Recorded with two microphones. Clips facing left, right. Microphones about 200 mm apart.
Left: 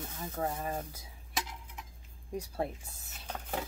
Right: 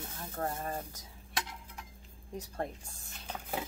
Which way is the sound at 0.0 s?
Centre (ahead or behind).